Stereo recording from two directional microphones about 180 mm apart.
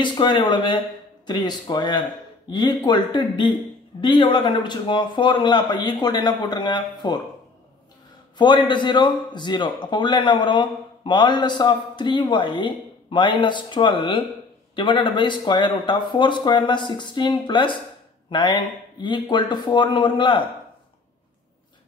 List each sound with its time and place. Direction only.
0.0 s a man's voice: 25° left (ahead or behind)
8.4 s a man's voice: 25° left (ahead or behind)